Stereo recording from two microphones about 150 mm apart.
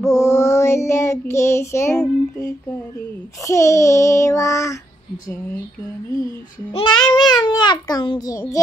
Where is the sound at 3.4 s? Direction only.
20° left (ahead or behind).